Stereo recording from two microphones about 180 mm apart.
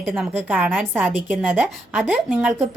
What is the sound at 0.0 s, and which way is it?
A woman's voice, 10° right (ahead or behind).